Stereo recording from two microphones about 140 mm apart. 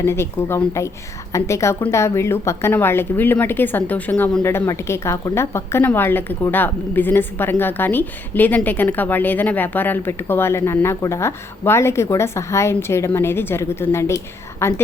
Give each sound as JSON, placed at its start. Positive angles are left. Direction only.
{"t": 0.0, "sound": "a woman's voice", "side_deg": 20}